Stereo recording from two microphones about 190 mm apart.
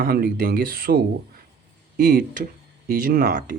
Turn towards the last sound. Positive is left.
turn(degrees=-45)  # may be behind; listen again after turning